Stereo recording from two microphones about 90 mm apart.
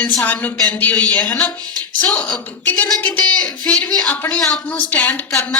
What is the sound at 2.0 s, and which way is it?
Speech, 15° left (ahead or behind).